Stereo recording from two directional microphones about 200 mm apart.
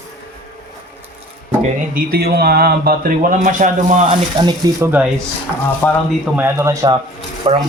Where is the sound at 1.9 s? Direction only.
50° right (ahead or behind).